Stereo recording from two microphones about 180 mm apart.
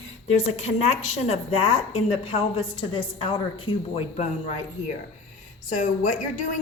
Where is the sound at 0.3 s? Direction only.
35° left (ahead or behind).